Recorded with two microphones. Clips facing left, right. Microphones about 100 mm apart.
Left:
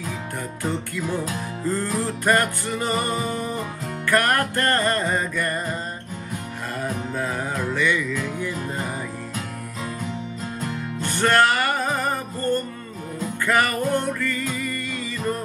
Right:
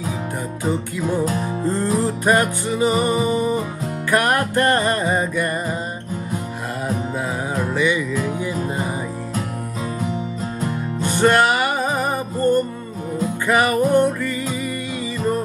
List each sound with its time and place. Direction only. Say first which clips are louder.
0.7 s music: right 5 dB; 15° right (ahead or behind)
7.2 s music: right 3 dB; 15° right (ahead or behind)
10.6 s music: right 5 dB; 15° right (ahead or behind)